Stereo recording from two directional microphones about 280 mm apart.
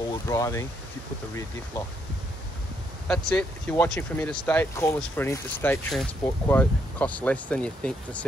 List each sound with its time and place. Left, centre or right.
0.3 s speech: centre
3.1 s speech: centre